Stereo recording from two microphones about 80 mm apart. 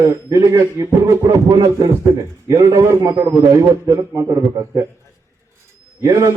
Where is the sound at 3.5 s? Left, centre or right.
Right.